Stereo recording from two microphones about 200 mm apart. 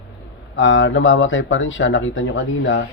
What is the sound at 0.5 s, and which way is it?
Speech, 70° left (ahead or behind).